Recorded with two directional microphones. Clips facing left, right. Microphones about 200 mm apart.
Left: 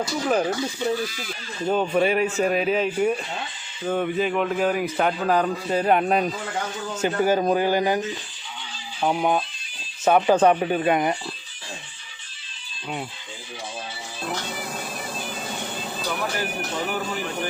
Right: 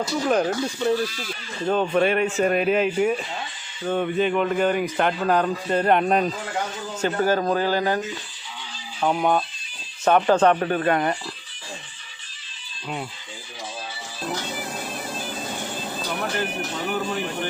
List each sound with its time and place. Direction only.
0.3 s a man's voice: 5° left (ahead or behind)